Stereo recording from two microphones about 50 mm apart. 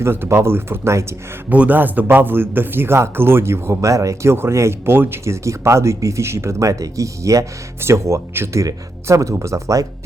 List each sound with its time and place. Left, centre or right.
0.0 s speech: right
1.5 s a man's voice: right
4.9 s speech: right
5.2 s speech: right
7.8 s speech: right